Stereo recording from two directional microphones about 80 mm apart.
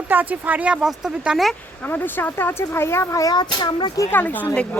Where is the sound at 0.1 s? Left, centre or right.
Right.